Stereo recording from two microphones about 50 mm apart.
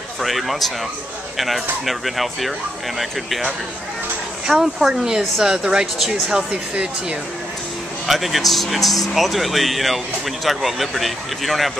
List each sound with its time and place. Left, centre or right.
0.2 s speech: centre
4.5 s speech: centre
8.1 s speech: centre